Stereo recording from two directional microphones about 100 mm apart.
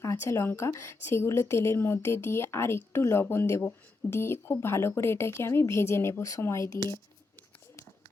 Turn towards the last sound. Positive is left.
turn(degrees=30)  # may be behind; listen again after turning